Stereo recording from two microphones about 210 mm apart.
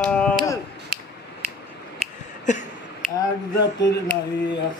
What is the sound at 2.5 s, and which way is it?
Speech, 35° left (ahead or behind).